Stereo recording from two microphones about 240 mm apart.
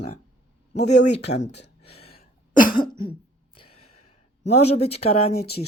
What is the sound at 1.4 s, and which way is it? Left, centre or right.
Speech, left.